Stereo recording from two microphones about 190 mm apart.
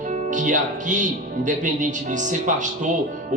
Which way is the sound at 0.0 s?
40° right (ahead or behind).